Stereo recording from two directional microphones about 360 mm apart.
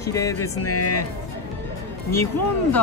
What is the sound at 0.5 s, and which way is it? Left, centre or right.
Speech, left.